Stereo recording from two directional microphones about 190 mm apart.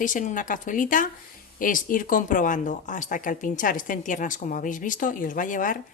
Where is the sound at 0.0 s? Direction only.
45° left (ahead or behind).